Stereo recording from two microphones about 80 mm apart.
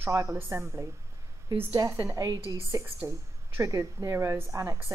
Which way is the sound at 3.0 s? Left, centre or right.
Right.